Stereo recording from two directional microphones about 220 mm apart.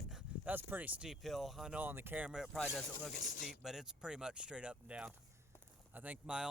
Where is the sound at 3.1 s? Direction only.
35° left (ahead or behind).